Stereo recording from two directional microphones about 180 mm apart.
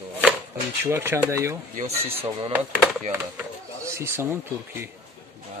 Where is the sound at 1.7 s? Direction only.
35° right (ahead or behind).